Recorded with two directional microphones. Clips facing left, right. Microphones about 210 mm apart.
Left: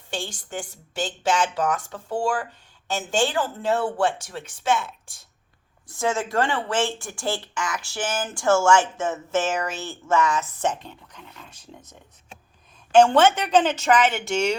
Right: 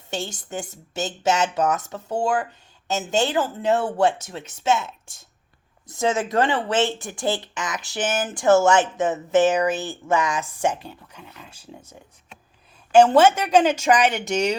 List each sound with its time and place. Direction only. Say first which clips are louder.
0.1 s speech: right 2 dB; 20° right (ahead or behind)